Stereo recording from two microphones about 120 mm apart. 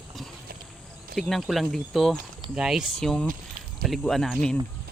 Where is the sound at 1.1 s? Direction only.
Centre (ahead or behind).